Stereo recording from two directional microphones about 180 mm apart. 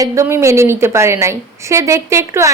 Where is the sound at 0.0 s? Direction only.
15° right (ahead or behind).